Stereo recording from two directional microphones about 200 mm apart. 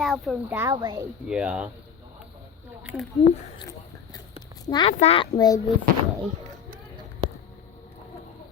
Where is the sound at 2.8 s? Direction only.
5° right (ahead or behind).